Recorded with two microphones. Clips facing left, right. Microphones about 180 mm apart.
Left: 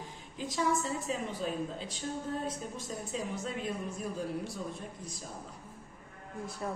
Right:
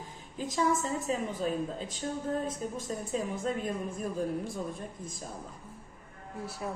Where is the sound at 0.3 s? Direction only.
45° right (ahead or behind).